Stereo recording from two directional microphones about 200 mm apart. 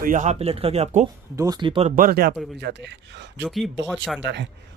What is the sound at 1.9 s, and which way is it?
Speech, 45° right (ahead or behind).